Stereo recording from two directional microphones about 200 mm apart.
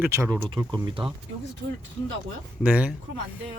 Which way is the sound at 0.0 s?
15° right (ahead or behind).